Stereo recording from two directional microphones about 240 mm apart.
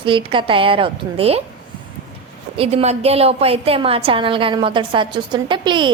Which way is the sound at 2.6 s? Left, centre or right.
Right.